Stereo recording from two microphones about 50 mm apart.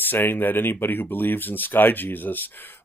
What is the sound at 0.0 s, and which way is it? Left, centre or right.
Speech, left.